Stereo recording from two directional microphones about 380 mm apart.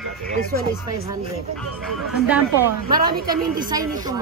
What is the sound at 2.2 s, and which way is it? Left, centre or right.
Speech, centre.